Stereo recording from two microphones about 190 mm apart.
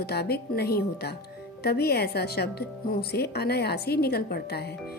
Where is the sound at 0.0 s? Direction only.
55° left (ahead or behind).